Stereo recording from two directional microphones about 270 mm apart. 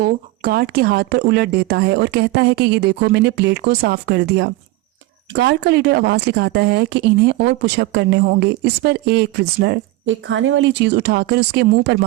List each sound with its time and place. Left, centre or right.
0.0 s speech: right